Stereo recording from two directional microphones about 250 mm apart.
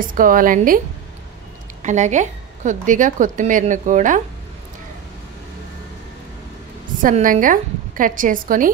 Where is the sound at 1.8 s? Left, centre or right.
Right.